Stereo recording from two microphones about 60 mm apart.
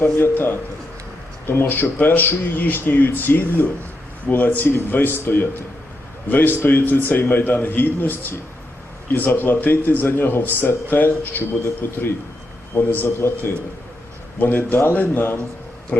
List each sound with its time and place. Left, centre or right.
0.0 s a man's voice: left
13.1 s a man's voice: left
15.9 s speech: centre